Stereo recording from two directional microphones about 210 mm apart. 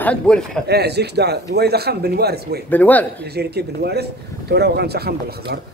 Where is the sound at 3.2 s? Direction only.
50° right (ahead or behind).